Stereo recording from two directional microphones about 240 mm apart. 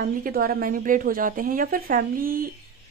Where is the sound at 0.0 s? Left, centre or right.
Right.